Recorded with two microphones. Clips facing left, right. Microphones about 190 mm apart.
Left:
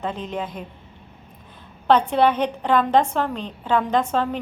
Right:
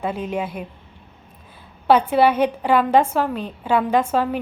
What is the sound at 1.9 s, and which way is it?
A woman's voice, 10° right (ahead or behind).